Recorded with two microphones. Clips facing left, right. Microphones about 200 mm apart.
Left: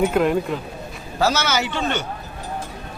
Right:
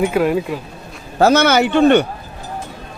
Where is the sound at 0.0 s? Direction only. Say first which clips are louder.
Right 2 dB; 5° right (ahead or behind).